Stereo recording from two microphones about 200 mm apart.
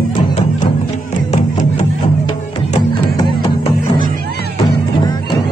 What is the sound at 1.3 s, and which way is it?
Music, 35° left (ahead or behind).